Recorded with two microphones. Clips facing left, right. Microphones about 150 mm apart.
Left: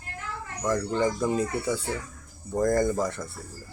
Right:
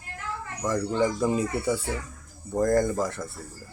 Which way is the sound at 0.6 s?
5° right (ahead or behind).